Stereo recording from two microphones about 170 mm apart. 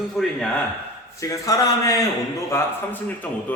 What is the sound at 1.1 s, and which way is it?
Speech, 20° left (ahead or behind).